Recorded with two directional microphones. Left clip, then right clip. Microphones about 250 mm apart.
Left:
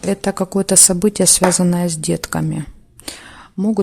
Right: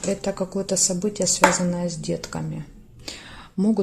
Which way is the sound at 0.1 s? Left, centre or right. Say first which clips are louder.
Left 7 dB; left.